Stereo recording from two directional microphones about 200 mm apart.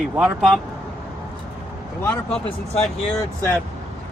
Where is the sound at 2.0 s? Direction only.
5° left (ahead or behind).